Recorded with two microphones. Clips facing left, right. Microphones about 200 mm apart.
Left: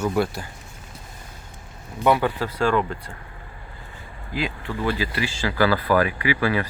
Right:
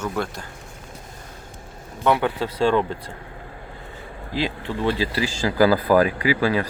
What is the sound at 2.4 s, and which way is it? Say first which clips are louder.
Speech: right 2 dB; 30° right (ahead or behind).